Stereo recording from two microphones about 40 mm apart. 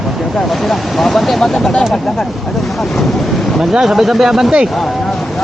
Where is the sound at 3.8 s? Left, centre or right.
Centre.